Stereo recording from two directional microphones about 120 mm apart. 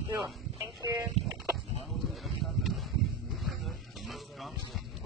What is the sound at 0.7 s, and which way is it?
Speech, 30° right (ahead or behind).